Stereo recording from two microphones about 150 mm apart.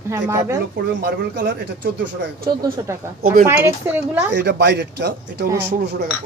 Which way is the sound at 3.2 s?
70° right (ahead or behind).